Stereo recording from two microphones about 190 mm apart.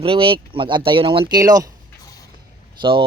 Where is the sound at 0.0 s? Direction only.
30° right (ahead or behind).